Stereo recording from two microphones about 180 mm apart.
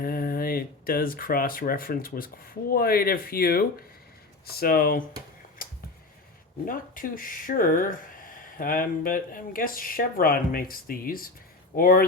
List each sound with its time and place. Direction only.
0.0 s speech: 55° left (ahead or behind)
5.6 s a sound: 50° left (ahead or behind)
6.7 s speech: 50° left (ahead or behind)